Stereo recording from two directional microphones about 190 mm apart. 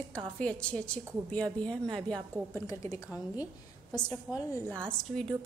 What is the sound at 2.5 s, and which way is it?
Speech, 15° left (ahead or behind).